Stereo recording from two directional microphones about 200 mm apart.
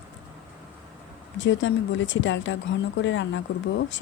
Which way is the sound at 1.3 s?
65° left (ahead or behind).